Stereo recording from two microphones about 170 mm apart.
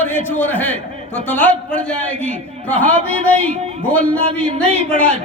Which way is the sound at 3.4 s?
40° right (ahead or behind).